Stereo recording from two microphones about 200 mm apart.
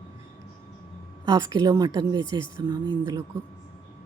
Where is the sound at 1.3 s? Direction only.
20° right (ahead or behind).